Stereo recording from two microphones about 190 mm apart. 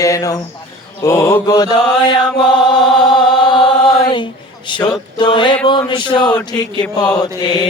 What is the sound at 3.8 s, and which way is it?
Mantra, 25° left (ahead or behind).